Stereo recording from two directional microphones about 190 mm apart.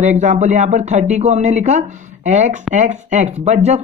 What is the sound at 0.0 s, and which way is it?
Speech, 40° right (ahead or behind).